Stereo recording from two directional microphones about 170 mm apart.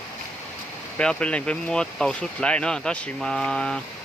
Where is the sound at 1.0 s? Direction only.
5° left (ahead or behind).